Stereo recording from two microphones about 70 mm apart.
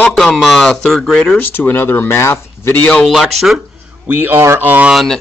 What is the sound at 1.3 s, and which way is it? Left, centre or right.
Speech, left.